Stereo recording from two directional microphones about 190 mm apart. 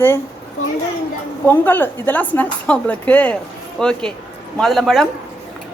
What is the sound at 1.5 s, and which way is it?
A woman's voice, 10° left (ahead or behind).